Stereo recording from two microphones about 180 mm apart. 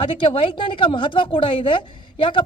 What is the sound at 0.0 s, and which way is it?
A woman's voice, 30° left (ahead or behind).